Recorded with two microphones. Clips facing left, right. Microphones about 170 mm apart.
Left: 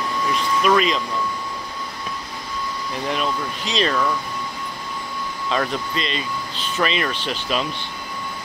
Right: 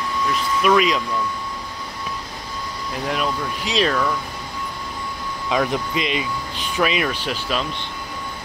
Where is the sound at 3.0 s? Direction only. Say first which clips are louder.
Right 1 dB; 5° right (ahead or behind).